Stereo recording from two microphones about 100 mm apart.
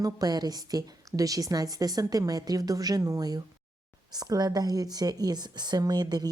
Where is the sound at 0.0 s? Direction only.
40° right (ahead or behind).